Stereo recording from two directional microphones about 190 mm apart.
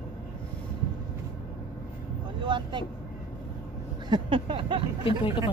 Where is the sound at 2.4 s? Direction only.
25° right (ahead or behind).